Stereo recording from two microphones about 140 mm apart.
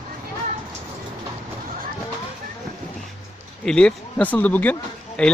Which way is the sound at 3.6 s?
5° left (ahead or behind).